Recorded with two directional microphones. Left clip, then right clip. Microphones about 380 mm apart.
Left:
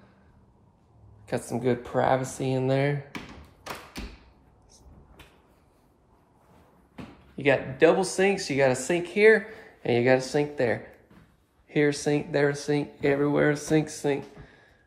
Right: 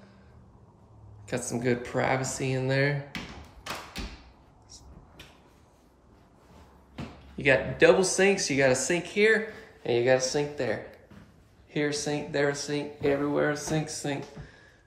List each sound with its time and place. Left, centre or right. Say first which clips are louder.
1.2 s speech: left 2 dB; centre
7.3 s speech: even; centre